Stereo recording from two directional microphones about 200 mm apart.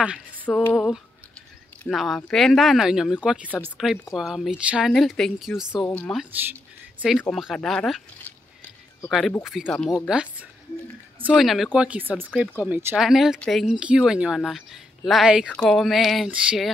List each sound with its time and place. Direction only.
0.5 s speech: 5° left (ahead or behind)
9.4 s speech: centre (ahead or behind)
11.3 s speech: centre (ahead or behind)